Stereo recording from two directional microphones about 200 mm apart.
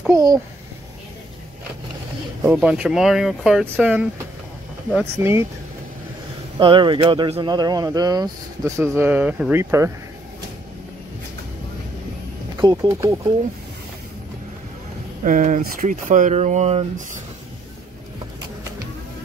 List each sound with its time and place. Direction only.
0.1 s speech: 20° right (ahead or behind)
2.4 s speech: 5° right (ahead or behind)
5.2 s speech: 10° right (ahead or behind)
6.6 s speech: 25° right (ahead or behind)
12.6 s speech: 20° right (ahead or behind)
15.2 s speech: 40° right (ahead or behind)